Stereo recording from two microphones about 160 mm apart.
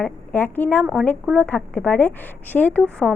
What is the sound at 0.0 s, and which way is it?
A woman's voice, 10° left (ahead or behind).